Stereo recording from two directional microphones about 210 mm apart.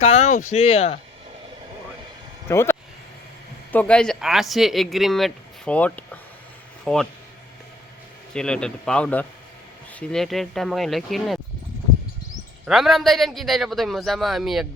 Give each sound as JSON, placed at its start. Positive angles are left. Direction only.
{"t": 0.0, "sound": "speech", "side_deg": 30}
{"t": 2.5, "sound": "speech", "side_deg": 10}
{"t": 8.3, "sound": "speech", "side_deg": 5}
{"t": 12.6, "sound": "speech", "side_deg": 0}